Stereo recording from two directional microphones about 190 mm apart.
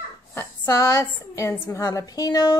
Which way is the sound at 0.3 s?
15° left (ahead or behind).